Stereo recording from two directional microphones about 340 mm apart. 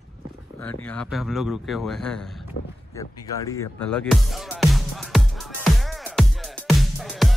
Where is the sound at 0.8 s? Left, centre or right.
Centre.